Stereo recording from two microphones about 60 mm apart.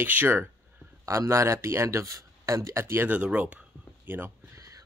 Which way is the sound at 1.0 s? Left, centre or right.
Right.